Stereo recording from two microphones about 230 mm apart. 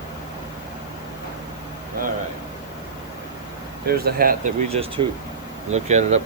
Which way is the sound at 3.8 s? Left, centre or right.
Right.